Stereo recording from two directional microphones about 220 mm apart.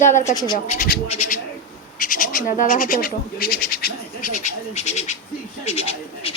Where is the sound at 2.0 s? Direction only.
40° left (ahead or behind).